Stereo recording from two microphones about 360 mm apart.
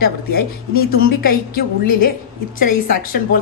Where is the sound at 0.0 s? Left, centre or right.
Left.